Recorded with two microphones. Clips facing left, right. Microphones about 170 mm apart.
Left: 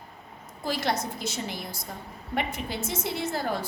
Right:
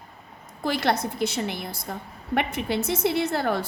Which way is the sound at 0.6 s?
65° right (ahead or behind).